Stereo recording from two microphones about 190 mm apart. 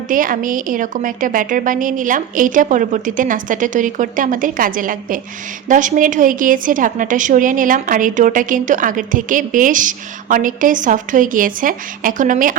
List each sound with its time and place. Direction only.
0.1 s a woman's voice: 45° right (ahead or behind)